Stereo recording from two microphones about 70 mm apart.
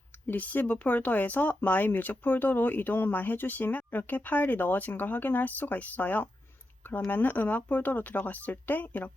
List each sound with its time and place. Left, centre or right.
0.3 s speech: left